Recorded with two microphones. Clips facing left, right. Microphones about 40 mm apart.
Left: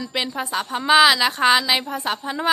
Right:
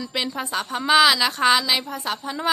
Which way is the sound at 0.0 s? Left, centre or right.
Centre.